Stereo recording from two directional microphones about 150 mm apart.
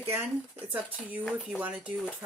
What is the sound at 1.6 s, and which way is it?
Speech, 10° right (ahead or behind).